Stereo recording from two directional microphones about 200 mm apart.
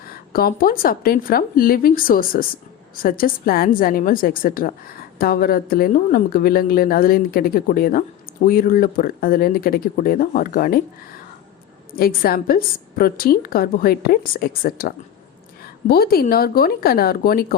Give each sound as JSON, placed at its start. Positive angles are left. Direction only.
{"t": 0.1, "sound": "a woman's voice", "side_deg": 45}
{"t": 11.9, "sound": "a woman's voice", "side_deg": 50}